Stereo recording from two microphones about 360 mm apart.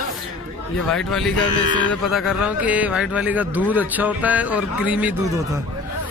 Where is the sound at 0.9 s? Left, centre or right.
Centre.